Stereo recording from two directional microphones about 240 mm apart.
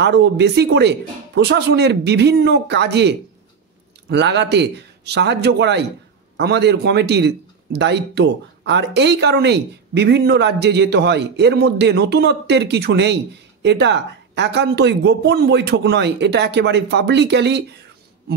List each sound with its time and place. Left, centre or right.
0.0 s a man's voice: right